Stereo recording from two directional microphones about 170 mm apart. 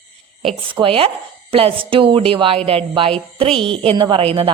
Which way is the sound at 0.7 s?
30° right (ahead or behind).